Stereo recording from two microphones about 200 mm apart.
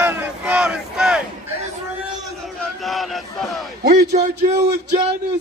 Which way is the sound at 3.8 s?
55° right (ahead or behind).